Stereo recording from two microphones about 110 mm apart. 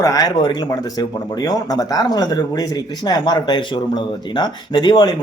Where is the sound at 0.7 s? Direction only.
35° left (ahead or behind).